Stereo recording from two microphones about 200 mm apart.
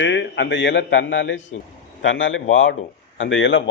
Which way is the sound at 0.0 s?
65° left (ahead or behind).